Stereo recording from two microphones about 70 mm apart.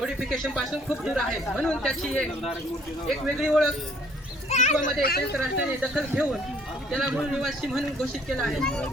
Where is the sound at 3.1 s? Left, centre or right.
Centre.